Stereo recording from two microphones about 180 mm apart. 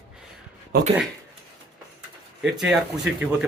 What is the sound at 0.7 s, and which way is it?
Speech, 60° right (ahead or behind).